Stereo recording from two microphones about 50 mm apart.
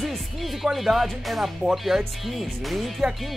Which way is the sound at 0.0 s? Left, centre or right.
Centre.